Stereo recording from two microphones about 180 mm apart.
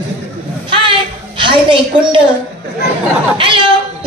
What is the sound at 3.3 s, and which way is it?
Speech, 25° right (ahead or behind).